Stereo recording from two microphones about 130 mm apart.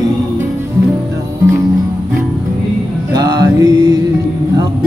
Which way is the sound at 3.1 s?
30° right (ahead or behind).